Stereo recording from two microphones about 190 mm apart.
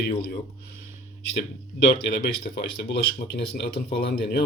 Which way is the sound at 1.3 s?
60° left (ahead or behind).